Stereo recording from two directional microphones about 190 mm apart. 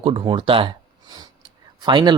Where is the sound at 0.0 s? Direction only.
25° right (ahead or behind).